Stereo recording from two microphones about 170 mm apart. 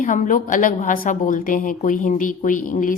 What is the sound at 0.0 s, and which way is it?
A woman's voice, 50° left (ahead or behind).